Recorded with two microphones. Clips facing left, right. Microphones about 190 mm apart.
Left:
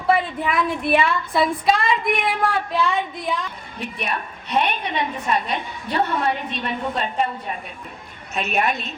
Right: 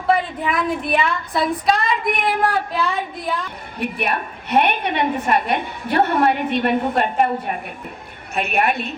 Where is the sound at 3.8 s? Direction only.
60° right (ahead or behind).